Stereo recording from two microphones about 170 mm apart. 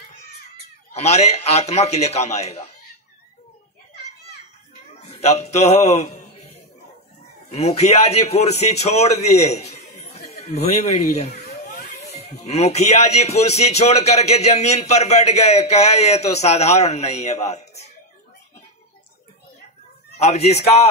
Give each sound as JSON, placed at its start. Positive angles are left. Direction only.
{"t": 0.9, "sound": "speech", "side_deg": 40}
{"t": 5.1, "sound": "speech", "side_deg": 40}
{"t": 7.5, "sound": "speech", "side_deg": 40}
{"t": 11.6, "sound": "music", "side_deg": 60}
{"t": 12.1, "sound": "speech", "side_deg": 40}
{"t": 20.2, "sound": "speech", "side_deg": 40}